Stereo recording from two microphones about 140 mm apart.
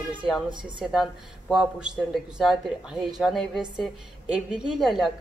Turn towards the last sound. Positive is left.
turn(degrees=0)  # may be behind; listen again after turning